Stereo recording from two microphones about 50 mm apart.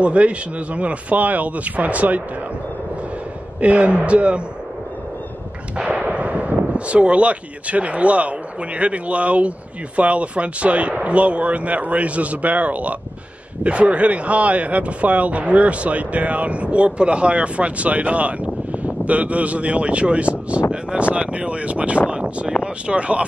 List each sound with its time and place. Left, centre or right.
0.0 s speech: right
3.6 s speech: right
5.8 s speech: right
22.1 s a sound: right
22.6 s speech: right